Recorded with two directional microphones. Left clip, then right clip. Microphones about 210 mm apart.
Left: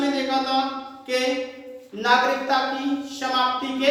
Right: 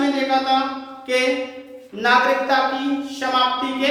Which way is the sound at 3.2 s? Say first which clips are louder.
Right 4 dB; 5° right (ahead or behind).